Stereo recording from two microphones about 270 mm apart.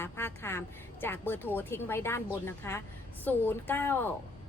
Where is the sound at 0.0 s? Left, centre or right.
Centre.